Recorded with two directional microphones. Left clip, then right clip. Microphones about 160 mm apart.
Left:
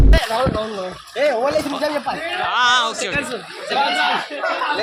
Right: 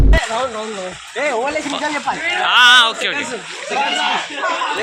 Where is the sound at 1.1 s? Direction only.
35° left (ahead or behind).